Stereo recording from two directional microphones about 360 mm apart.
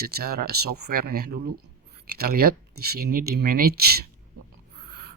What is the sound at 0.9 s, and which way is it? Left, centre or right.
Speech, right.